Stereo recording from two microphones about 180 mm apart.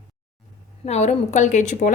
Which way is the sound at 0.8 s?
40° left (ahead or behind).